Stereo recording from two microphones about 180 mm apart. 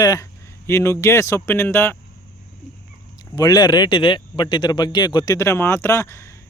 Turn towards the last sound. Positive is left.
turn(degrees=15)  # may be behind; listen again after turning